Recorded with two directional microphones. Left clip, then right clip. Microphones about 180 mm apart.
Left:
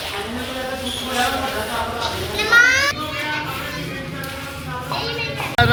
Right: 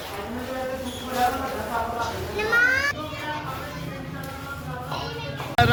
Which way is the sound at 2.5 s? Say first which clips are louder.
Left 7 dB; 55° right (ahead or behind).